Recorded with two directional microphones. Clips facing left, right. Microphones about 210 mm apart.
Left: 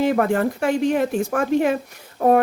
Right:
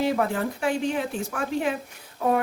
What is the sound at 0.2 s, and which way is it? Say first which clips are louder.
Speech: left 6 dB; 55° left (ahead or behind).